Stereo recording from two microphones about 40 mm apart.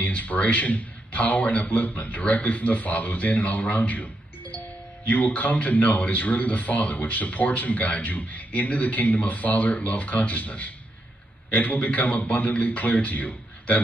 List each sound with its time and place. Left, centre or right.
0.0 s speech: left